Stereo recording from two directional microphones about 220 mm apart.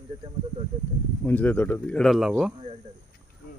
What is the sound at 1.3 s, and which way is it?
Speech, 10° left (ahead or behind).